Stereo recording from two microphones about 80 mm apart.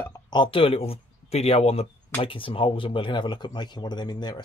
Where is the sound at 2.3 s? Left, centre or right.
Left.